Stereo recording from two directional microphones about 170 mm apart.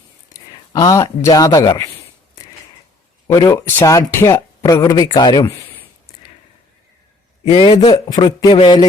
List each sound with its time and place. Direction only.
0.7 s speech: 20° left (ahead or behind)
3.2 s speech: 20° left (ahead or behind)
7.4 s speech: 30° left (ahead or behind)